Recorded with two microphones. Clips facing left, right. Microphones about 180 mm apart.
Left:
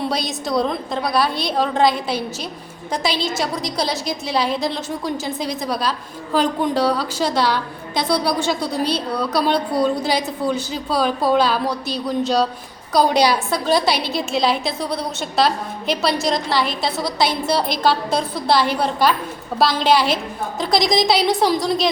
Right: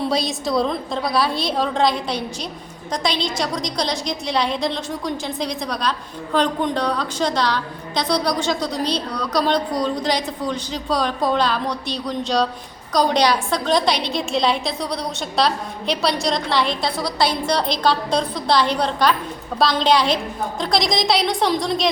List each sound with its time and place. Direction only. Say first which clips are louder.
0.1 s a woman's voice: right 1 dB; centre (ahead or behind)
17.0 s a woman's voice: left 1 dB; 25° left (ahead or behind)
17.4 s a woman's voice: left 1 dB; 5° left (ahead or behind)